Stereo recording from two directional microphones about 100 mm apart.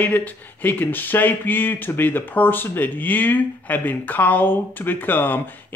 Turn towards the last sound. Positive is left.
turn(degrees=20)  # may be behind; listen again after turning